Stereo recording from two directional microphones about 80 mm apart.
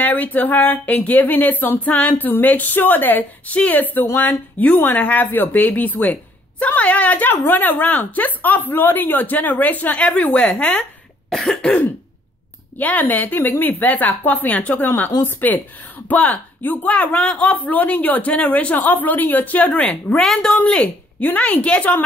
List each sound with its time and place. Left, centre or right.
0.0 s speech: left
12.7 s speech: left
14.9 s a woman's voice: left